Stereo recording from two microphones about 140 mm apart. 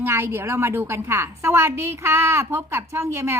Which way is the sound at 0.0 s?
15° right (ahead or behind).